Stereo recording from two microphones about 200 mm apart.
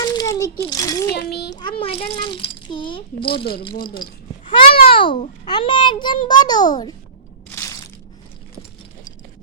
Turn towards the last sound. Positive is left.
turn(degrees=15)  # may be behind; listen again after turning